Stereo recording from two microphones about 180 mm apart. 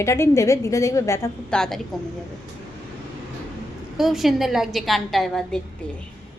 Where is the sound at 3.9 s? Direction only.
Centre (ahead or behind).